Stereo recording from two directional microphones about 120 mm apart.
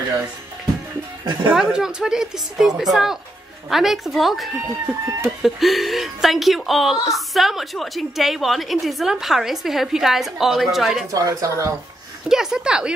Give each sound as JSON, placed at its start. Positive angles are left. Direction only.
{"t": 1.5, "sound": "speech", "side_deg": -5}
{"t": 4.6, "sound": "speech", "side_deg": -25}
{"t": 5.4, "sound": "speech", "side_deg": 0}
{"t": 11.1, "sound": "speech", "side_deg": -30}
{"t": 12.3, "sound": "a woman's voice", "side_deg": -5}